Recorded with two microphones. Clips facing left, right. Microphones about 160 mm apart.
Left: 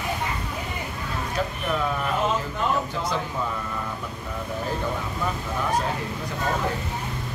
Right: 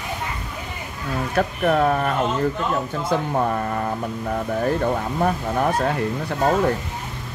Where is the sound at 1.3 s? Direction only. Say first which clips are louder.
Right 8 dB; 60° right (ahead or behind).